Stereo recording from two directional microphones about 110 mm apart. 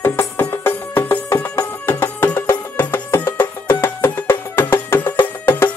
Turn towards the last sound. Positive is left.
turn(degrees=20)  # may be behind; listen again after turning